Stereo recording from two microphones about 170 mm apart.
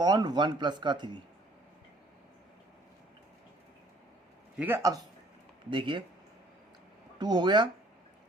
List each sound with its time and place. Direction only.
0.0 s speech: 25° right (ahead or behind)
4.5 s speech: 10° right (ahead or behind)
5.7 s speech: 30° right (ahead or behind)
7.2 s speech: 25° right (ahead or behind)